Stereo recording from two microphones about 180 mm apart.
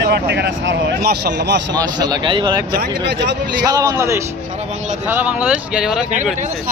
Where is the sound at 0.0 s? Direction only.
65° right (ahead or behind).